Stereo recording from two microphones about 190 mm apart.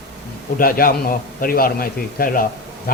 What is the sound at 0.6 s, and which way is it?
A man's voice, 50° left (ahead or behind).